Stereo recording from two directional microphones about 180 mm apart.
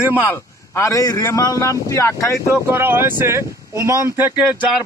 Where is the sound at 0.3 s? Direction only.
15° left (ahead or behind).